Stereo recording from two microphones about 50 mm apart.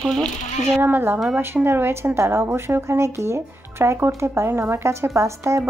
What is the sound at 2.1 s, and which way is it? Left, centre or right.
Speech, right.